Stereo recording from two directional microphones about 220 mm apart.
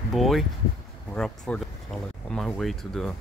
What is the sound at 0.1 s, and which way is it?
Speech, centre (ahead or behind).